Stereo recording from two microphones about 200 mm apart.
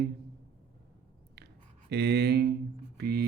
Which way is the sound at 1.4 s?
55° right (ahead or behind).